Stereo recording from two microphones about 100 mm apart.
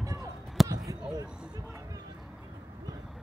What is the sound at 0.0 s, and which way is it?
Basketball bounce, 30° right (ahead or behind).